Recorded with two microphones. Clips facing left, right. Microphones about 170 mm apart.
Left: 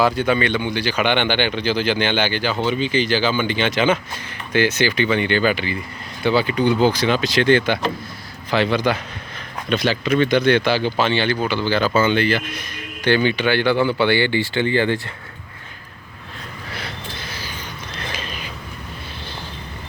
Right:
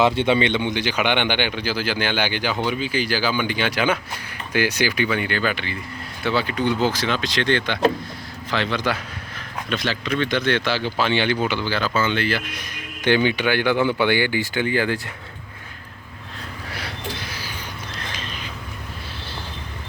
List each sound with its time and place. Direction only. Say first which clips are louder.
0.0 s speech: even; 25° right (ahead or behind); by 11.1 s centre (ahead or behind)
11.1 s speech: left 1 dB; 15° right (ahead or behind)
12.0 s speech: left 4 dB; centre (ahead or behind)
13.1 s speech: left 1 dB; 15° right (ahead or behind)
17.2 s creak: left 1 dB; 10° right (ahead or behind)